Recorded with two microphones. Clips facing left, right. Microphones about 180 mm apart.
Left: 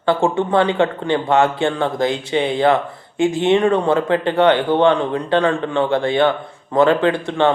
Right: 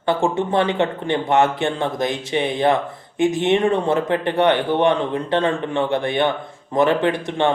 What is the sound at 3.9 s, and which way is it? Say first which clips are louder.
Speech: left 3 dB; 20° right (ahead or behind).